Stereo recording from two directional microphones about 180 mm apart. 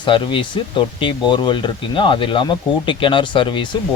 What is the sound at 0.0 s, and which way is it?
Speech, 30° left (ahead or behind).